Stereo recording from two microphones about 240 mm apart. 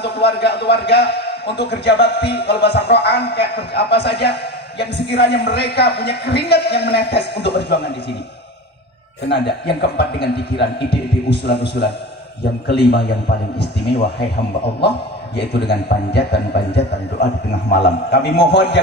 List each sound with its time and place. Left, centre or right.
0.0 s a man's voice: left
9.3 s a man's voice: left
15.3 s a man's voice: left